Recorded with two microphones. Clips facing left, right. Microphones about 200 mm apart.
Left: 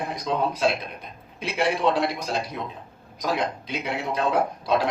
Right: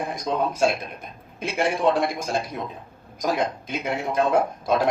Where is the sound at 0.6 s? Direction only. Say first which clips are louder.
Right 2 dB; 50° right (ahead or behind).